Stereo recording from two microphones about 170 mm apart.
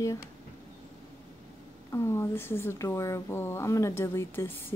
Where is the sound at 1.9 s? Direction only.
15° left (ahead or behind).